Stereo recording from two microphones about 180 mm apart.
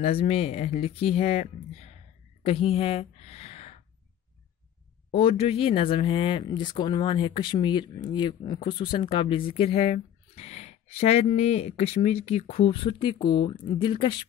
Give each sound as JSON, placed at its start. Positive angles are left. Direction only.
{"t": 0.0, "sound": "speech", "side_deg": 35}
{"t": 2.4, "sound": "a sound", "side_deg": 35}
{"t": 5.1, "sound": "speech", "side_deg": 30}